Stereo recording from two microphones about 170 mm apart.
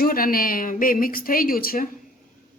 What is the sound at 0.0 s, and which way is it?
A woman's voice, 60° left (ahead or behind).